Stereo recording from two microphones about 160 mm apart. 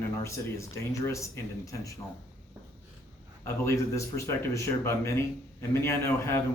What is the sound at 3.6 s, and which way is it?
Speech, 20° left (ahead or behind).